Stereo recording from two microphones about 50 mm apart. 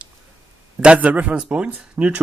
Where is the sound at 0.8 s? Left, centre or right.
Right.